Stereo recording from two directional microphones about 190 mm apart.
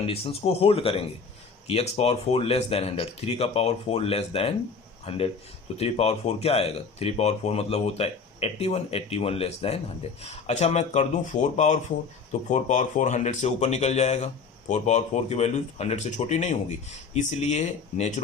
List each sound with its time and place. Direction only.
0.1 s speech: 30° left (ahead or behind)